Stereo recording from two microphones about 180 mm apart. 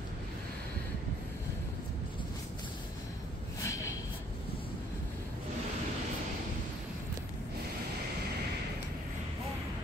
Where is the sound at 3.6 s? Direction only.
15° left (ahead or behind).